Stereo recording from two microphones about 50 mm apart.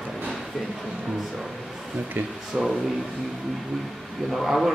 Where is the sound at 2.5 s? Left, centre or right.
Centre.